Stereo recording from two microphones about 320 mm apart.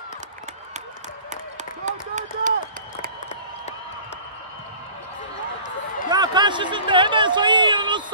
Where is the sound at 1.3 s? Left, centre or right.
Right.